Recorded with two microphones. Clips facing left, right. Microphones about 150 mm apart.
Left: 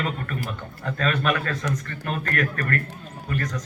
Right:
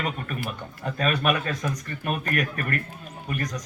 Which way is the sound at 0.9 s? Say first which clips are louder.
Even; 15° right (ahead or behind).